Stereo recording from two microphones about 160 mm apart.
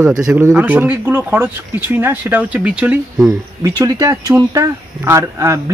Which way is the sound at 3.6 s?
20° right (ahead or behind).